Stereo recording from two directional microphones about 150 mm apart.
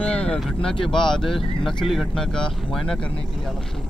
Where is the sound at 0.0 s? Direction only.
5° left (ahead or behind).